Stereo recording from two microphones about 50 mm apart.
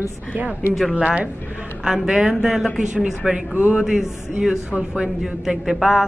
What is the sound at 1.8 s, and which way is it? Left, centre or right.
A woman's voice, centre.